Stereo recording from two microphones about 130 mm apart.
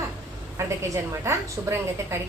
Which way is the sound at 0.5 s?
20° right (ahead or behind).